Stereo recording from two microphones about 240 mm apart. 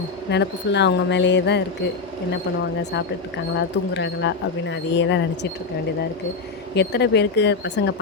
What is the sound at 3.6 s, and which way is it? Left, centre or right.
Speech, left.